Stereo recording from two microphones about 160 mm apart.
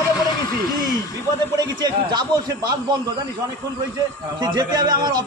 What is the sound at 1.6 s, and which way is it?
Speech, 30° right (ahead or behind).